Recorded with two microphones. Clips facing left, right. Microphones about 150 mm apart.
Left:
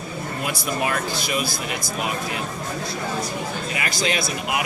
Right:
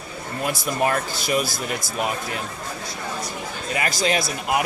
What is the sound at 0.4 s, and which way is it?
Speech, 40° right (ahead or behind).